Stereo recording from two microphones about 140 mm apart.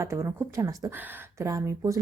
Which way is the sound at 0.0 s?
20° right (ahead or behind).